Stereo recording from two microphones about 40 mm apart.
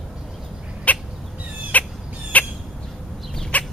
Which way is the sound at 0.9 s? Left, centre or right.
Left.